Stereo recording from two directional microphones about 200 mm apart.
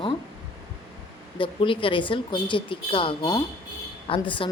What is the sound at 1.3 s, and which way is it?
Speech, 25° left (ahead or behind).